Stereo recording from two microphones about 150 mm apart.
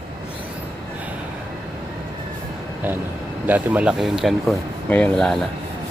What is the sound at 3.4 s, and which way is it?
Speech, 10° right (ahead or behind).